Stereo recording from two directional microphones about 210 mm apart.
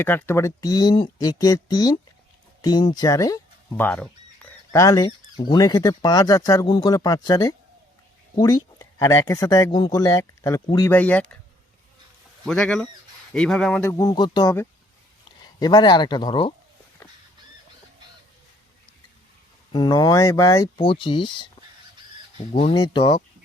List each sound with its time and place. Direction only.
0.0 s speech: 10° left (ahead or behind)
12.5 s speech: 5° left (ahead or behind)
13.9 s speech: 15° left (ahead or behind)
19.7 s speech: 20° left (ahead or behind)
22.4 s speech: 30° left (ahead or behind)